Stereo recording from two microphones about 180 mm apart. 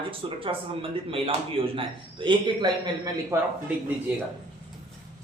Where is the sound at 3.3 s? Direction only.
15° right (ahead or behind).